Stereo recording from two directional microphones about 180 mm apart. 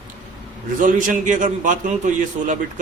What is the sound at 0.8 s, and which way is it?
A man's voice, 45° right (ahead or behind).